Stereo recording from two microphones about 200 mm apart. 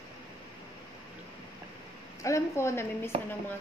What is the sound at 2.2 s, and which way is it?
Speech, 15° left (ahead or behind).